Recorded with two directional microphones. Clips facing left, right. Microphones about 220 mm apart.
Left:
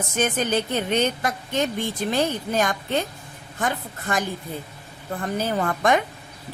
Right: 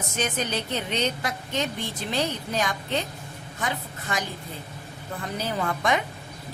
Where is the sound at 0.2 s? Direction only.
50° left (ahead or behind).